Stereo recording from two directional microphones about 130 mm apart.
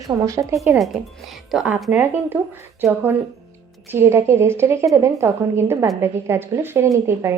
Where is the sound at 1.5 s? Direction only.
10° right (ahead or behind).